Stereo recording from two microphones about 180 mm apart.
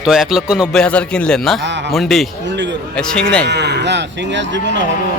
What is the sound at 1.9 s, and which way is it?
Speech, centre (ahead or behind).